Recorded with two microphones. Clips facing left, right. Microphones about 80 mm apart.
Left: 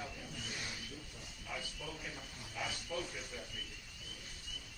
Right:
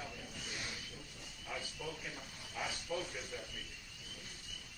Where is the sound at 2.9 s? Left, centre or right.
Centre.